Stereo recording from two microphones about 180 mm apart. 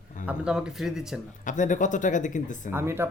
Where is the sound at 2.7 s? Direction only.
15° right (ahead or behind).